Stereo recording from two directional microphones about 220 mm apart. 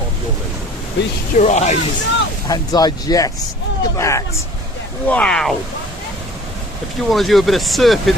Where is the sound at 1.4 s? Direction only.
30° left (ahead or behind).